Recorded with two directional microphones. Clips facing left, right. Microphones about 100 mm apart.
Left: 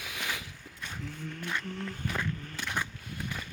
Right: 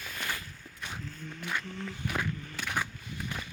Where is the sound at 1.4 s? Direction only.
5° right (ahead or behind).